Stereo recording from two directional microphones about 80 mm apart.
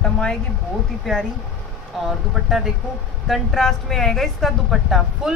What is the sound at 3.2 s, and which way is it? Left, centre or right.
A woman's voice, centre.